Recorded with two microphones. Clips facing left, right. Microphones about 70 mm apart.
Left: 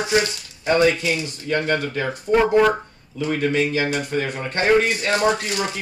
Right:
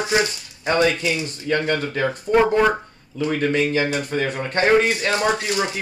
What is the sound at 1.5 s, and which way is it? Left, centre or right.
Speech, left.